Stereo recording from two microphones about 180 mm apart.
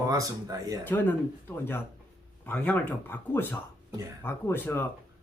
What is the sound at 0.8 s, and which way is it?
Speech, 10° left (ahead or behind).